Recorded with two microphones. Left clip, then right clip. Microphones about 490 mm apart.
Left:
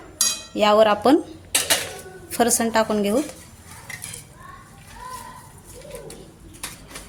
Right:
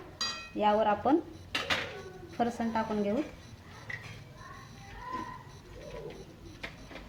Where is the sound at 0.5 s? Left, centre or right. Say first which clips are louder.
Left 11 dB; centre.